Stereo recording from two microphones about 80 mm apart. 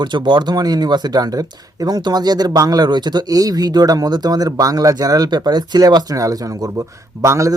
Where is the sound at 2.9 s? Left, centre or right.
Right.